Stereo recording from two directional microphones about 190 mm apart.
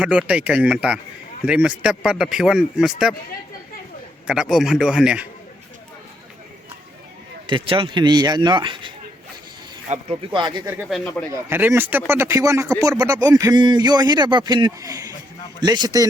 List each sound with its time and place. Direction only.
0.0 s speech: 5° right (ahead or behind)
4.3 s speech: 5° right (ahead or behind)
7.4 s speech: 25° right (ahead or behind)
9.9 s speech: 30° right (ahead or behind)
10.8 s speech: centre (ahead or behind)
11.4 s speech: 10° right (ahead or behind)